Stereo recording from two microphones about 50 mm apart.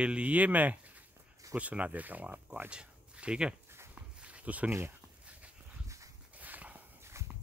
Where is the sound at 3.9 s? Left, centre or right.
Right.